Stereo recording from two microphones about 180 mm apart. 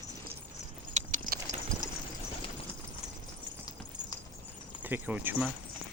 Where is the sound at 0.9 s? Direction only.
40° right (ahead or behind).